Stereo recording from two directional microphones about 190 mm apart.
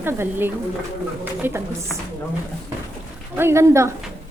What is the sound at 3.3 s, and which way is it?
Speech, 15° right (ahead or behind).